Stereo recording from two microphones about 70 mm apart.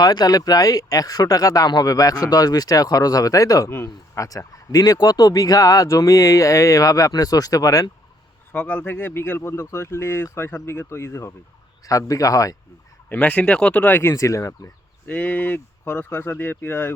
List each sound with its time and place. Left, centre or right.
0.0 s speech: left
3.7 s speech: left
8.5 s speech: left
9.0 s speech: left
11.9 s speech: left
13.1 s speech: left
13.8 s speech: left
14.1 s speech: left
15.0 s speech: centre